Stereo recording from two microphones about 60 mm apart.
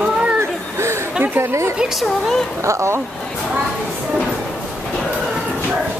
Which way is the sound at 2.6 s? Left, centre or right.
Right.